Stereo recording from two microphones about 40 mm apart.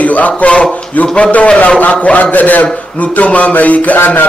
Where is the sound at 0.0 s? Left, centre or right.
Left.